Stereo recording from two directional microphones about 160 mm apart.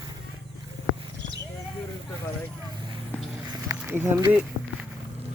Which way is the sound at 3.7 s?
15° right (ahead or behind).